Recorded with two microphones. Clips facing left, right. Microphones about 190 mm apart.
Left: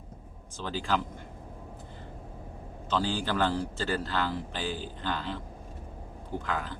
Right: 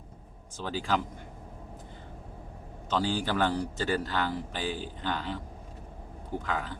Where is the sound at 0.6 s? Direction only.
10° right (ahead or behind).